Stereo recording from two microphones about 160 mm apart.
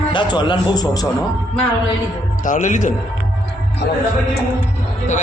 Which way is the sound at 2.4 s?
50° left (ahead or behind).